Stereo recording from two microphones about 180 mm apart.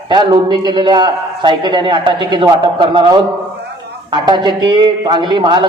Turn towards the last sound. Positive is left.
turn(degrees=-25)  # may be behind; listen again after turning